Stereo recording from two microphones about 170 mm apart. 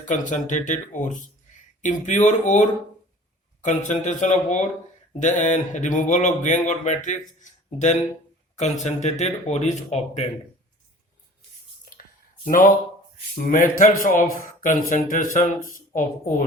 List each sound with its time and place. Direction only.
0.0 s speech: 45° left (ahead or behind)
13.4 s speech: 50° left (ahead or behind)